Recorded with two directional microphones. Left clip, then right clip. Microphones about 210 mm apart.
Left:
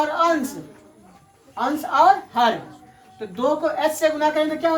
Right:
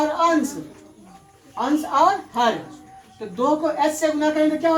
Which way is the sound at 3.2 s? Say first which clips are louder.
Right 1 dB; 10° left (ahead or behind).